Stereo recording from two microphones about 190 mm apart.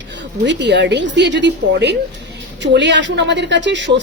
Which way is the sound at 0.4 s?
65° right (ahead or behind).